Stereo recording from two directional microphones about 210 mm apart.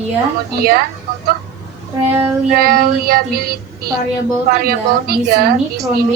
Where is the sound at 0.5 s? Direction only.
45° right (ahead or behind).